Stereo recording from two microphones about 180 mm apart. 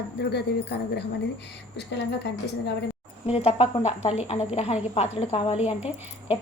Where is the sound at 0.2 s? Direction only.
65° left (ahead or behind).